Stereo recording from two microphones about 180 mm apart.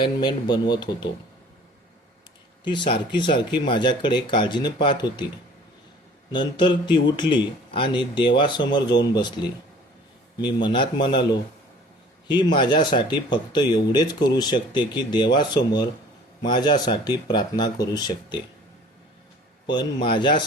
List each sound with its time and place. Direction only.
0.0 s speech: 25° left (ahead or behind)
2.6 s speech: 25° left (ahead or behind)
6.3 s speech: 25° left (ahead or behind)
19.6 s speech: 25° left (ahead or behind)